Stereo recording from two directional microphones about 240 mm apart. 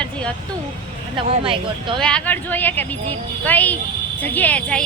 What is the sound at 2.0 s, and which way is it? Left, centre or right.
A woman's voice, centre.